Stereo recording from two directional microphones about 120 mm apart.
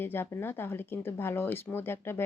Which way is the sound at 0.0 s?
20° left (ahead or behind).